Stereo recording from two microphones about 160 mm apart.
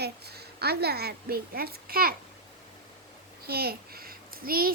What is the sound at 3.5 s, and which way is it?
A child's voice, 75° right (ahead or behind).